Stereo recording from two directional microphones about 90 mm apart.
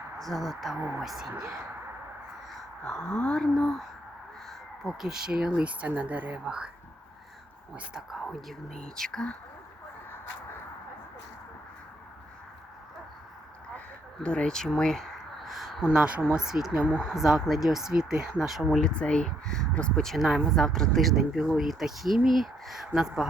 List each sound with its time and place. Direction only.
0.2 s speech: centre (ahead or behind)
1.4 s speech: 35° right (ahead or behind)
2.8 s speech: 5° left (ahead or behind); by 6.7 s 10° right (ahead or behind)
7.9 s speech: 5° right (ahead or behind)
13.7 s speech: 10° left (ahead or behind); by 18.8 s 5° right (ahead or behind)
18.8 s speech: 10° left (ahead or behind); by 20.7 s 5° right (ahead or behind)
20.7 s speech: 5° left (ahead or behind)